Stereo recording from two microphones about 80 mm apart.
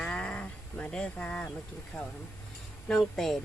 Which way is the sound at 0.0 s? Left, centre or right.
Centre.